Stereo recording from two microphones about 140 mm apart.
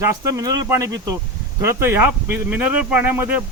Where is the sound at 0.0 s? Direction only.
25° right (ahead or behind).